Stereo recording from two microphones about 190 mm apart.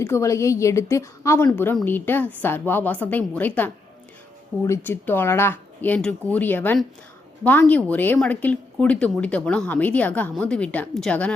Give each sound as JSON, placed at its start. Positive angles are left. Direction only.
{"t": 0.0, "sound": "a woman's voice", "side_deg": 15}